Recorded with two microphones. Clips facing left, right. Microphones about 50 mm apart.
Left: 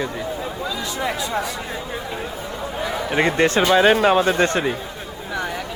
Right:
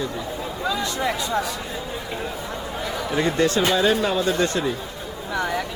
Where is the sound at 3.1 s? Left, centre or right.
Left.